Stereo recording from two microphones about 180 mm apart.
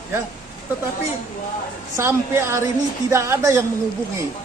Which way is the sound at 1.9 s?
15° right (ahead or behind).